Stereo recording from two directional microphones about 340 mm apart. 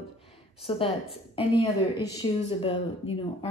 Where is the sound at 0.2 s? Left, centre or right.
Centre.